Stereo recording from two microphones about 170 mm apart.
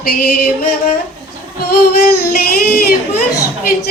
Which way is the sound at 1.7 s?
60° left (ahead or behind).